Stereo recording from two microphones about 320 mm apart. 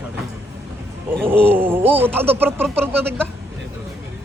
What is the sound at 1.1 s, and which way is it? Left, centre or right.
Speech, centre.